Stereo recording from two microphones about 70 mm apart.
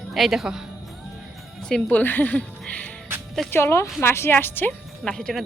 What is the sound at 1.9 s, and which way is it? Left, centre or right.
Speech, left.